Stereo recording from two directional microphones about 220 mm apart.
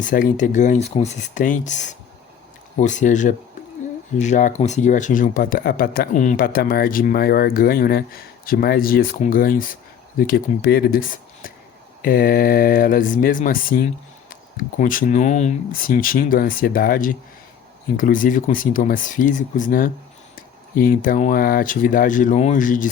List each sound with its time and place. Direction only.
0.0 s speech: 35° left (ahead or behind)